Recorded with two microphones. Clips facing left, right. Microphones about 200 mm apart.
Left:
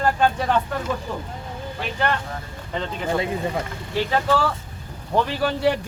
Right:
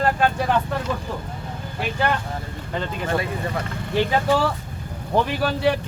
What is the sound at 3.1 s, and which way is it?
Speech, 15° left (ahead or behind).